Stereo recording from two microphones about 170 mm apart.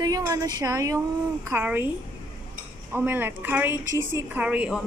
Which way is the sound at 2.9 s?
10° right (ahead or behind).